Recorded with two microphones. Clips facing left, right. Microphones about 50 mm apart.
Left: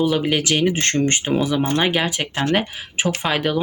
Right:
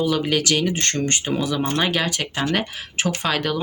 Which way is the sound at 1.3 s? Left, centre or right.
Centre.